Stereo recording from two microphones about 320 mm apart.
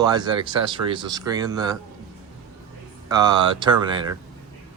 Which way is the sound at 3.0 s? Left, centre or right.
Centre.